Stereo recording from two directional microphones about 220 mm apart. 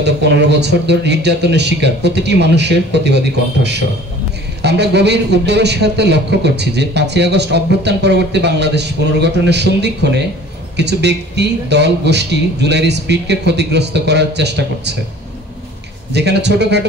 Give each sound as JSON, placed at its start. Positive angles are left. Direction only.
{"t": 0.0, "sound": "a man's voice", "side_deg": -50}
{"t": 16.1, "sound": "a man's voice", "side_deg": -50}